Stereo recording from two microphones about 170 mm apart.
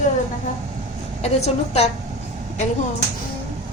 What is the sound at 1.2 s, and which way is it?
Speech, 40° left (ahead or behind).